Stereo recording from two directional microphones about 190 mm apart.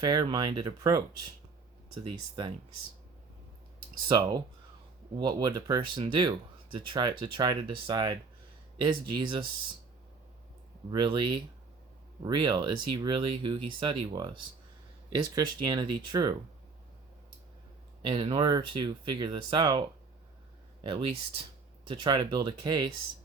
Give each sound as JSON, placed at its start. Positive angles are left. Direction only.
{"t": 0.0, "sound": "speech", "side_deg": -20}
{"t": 2.0, "sound": "speech", "side_deg": -25}
{"t": 4.1, "sound": "speech", "side_deg": -25}
{"t": 10.9, "sound": "speech", "side_deg": -25}
{"t": 18.0, "sound": "speech", "side_deg": -25}
{"t": 20.8, "sound": "speech", "side_deg": -25}